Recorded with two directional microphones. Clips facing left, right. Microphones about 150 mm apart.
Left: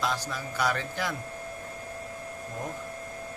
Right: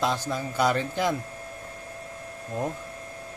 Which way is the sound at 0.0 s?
25° right (ahead or behind).